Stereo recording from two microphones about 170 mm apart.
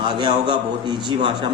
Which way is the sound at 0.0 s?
30° right (ahead or behind).